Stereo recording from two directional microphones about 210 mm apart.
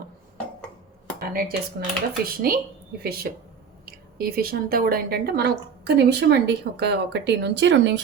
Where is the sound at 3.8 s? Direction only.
45° right (ahead or behind).